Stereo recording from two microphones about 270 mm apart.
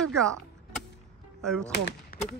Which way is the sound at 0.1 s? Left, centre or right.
Centre.